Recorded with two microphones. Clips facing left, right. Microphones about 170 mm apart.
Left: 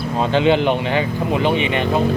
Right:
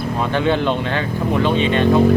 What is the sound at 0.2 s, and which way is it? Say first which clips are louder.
Speech: left 3 dB; 20° left (ahead or behind).